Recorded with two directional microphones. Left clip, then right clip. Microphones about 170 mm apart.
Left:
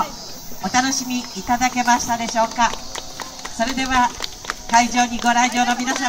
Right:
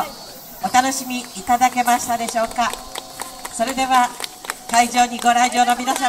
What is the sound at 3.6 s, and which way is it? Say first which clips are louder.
Speech: right 2 dB; 15° left (ahead or behind).